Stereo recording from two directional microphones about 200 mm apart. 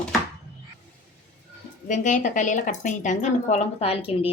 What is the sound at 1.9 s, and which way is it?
Speech, 40° left (ahead or behind).